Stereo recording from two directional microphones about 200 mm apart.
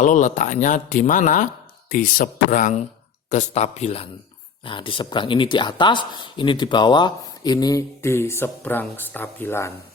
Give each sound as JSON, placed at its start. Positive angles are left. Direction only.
{"t": 0.0, "sound": "speech", "side_deg": 40}